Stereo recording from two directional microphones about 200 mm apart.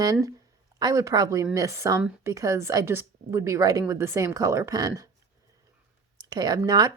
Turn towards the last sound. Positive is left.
turn(degrees=-20)  # may be behind; listen again after turning